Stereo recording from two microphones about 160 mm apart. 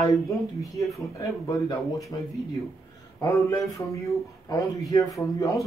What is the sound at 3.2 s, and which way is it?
A man's voice, 20° left (ahead or behind).